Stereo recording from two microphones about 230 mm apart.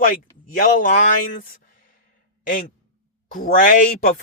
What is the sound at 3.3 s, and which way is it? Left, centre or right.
Speech, left.